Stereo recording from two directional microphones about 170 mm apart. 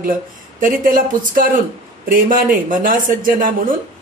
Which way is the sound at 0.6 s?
50° right (ahead or behind).